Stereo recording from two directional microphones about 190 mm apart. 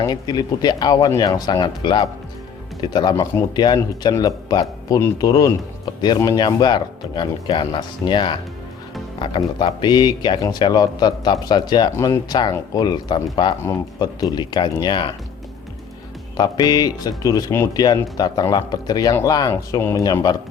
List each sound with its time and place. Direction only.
0.0 s speech: 20° left (ahead or behind)
16.4 s speech: 20° left (ahead or behind)